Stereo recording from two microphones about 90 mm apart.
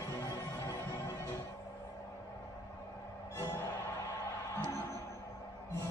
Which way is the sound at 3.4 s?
30° left (ahead or behind).